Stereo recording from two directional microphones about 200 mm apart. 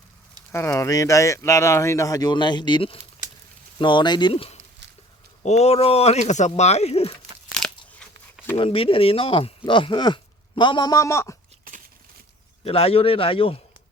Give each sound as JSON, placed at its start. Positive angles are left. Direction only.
{"t": 0.5, "sound": "speech", "side_deg": 15}
{"t": 8.5, "sound": "speech", "side_deg": 25}
{"t": 12.6, "sound": "speech", "side_deg": 30}